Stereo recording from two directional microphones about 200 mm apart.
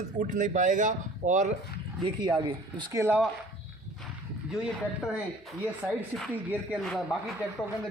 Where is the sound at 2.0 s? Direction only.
25° right (ahead or behind).